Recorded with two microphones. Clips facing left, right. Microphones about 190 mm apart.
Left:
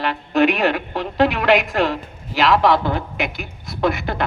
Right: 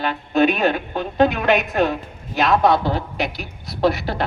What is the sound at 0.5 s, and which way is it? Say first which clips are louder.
A woman's voice: even; 85° left.